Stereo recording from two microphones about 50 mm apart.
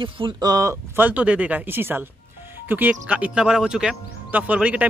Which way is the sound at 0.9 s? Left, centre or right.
Right.